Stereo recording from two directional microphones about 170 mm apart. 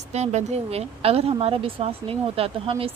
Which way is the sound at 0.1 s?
40° right (ahead or behind).